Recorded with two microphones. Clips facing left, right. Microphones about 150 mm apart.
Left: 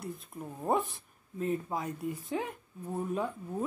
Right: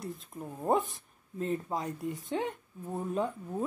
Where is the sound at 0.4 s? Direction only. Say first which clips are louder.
Right 2 dB; 5° right (ahead or behind).